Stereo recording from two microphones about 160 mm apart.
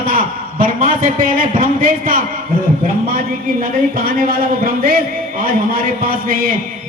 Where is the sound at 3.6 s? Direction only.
65° right (ahead or behind).